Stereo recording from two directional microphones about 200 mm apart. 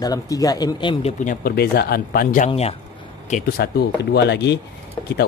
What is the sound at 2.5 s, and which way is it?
Speech, 30° left (ahead or behind).